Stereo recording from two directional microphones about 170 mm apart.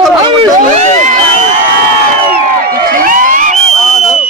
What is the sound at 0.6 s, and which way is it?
Speech, 45° right (ahead or behind).